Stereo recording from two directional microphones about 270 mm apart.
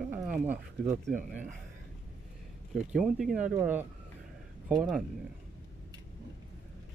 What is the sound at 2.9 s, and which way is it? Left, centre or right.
Speech, centre.